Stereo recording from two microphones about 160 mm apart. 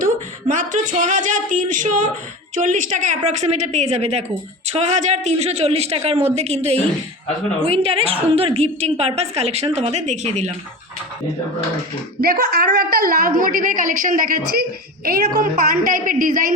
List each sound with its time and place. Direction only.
0.0 s a woman's voice: 55° right (ahead or behind)
12.2 s a woman's voice: 75° right (ahead or behind)